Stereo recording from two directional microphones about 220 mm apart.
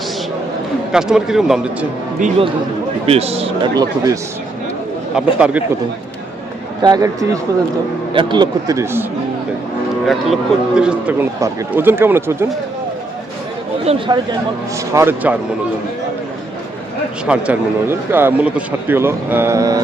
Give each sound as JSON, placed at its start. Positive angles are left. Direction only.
{"t": 0.9, "sound": "a man's voice", "side_deg": 0}
{"t": 3.1, "sound": "speech", "side_deg": -30}
{"t": 5.1, "sound": "a man's voice", "side_deg": -5}
{"t": 6.8, "sound": "speech", "side_deg": -15}
{"t": 10.1, "sound": "speech", "side_deg": 0}
{"t": 13.9, "sound": "speech", "side_deg": -25}
{"t": 14.9, "sound": "speech", "side_deg": -10}
{"t": 17.2, "sound": "speech", "side_deg": -5}